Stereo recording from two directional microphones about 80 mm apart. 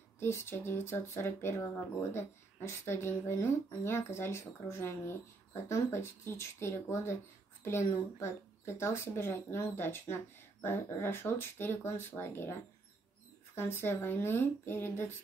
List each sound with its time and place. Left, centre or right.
0.2 s speech: left
13.6 s speech: left